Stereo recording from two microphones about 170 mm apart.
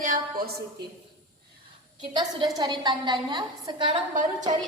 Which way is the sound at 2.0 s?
25° right (ahead or behind).